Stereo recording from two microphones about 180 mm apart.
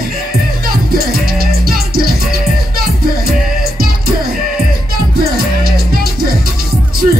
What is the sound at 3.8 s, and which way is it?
Music, 55° right (ahead or behind).